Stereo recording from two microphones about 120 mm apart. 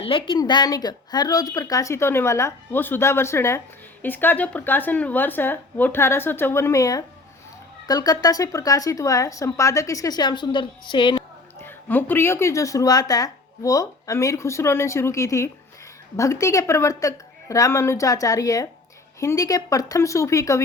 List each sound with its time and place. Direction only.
0.0 s a woman's voice: 45° left (ahead or behind)
0.3 s a woman's voice: 35° left (ahead or behind)
11.6 s speech: 15° left (ahead or behind)